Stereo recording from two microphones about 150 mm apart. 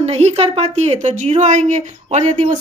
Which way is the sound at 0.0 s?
45° right (ahead or behind).